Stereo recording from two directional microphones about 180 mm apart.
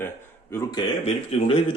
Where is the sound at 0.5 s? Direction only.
15° left (ahead or behind).